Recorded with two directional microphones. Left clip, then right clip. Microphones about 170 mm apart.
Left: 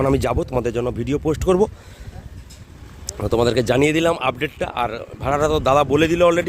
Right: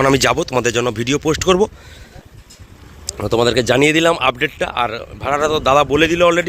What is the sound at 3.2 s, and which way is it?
Speech, 5° left (ahead or behind).